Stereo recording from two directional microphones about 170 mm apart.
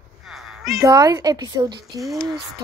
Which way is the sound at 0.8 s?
20° right (ahead or behind).